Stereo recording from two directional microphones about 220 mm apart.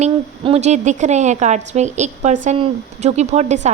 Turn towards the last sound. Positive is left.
turn(degrees=-30)  # may be behind; listen again after turning